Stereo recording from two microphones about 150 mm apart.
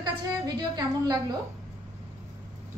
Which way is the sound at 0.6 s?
30° right (ahead or behind).